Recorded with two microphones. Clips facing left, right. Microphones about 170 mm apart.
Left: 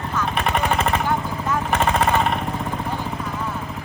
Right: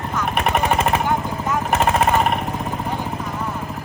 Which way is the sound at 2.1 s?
5° right (ahead or behind).